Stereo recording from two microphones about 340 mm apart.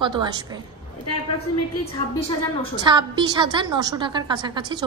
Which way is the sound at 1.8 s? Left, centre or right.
Centre.